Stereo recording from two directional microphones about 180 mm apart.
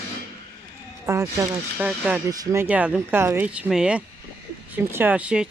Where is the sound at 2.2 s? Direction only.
15° right (ahead or behind).